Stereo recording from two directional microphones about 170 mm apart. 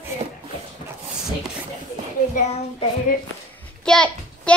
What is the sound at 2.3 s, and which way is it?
Speech, 35° left (ahead or behind).